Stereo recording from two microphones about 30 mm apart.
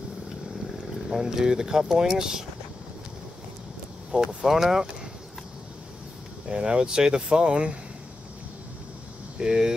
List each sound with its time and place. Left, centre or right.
1.0 s speech: centre
4.1 s speech: right
4.5 s speech: centre
6.5 s speech: right
7.2 s speech: right
9.4 s speech: right